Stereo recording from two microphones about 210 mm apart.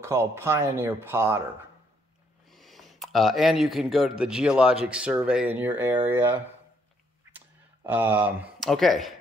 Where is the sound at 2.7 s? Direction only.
Centre (ahead or behind).